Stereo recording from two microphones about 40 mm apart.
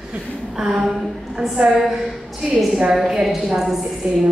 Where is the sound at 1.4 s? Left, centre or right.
Right.